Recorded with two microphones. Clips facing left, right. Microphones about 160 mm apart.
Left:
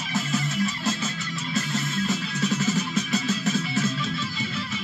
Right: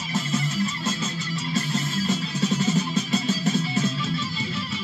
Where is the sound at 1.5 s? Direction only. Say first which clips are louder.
Right 1 dB; 30° right (ahead or behind).